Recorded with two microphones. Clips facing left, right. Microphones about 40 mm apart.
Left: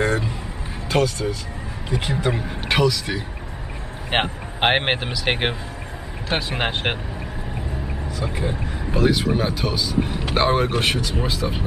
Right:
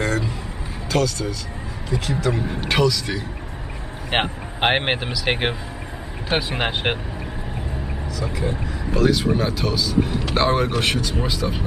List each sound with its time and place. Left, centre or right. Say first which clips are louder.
0.0 s a sound: left 1 dB; left
0.8 s speech: left 1 dB; left
2.7 s speech: even; centre
8.5 s speech: right 1 dB; centre